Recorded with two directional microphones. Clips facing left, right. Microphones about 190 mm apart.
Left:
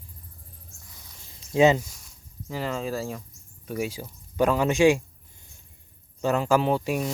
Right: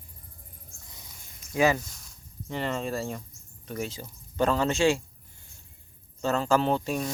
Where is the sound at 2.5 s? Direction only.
Centre (ahead or behind).